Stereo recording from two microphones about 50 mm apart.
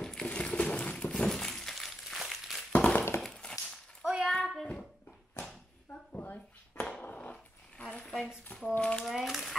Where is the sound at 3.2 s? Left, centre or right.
Centre.